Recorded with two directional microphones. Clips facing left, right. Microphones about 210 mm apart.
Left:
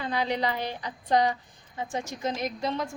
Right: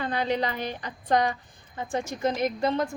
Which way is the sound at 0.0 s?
50° right (ahead or behind).